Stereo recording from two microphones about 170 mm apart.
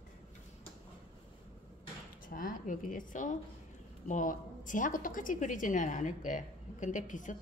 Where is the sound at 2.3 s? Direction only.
55° left (ahead or behind).